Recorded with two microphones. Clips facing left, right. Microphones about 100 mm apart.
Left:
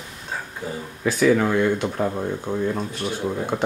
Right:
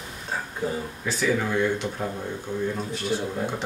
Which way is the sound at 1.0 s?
70° left (ahead or behind).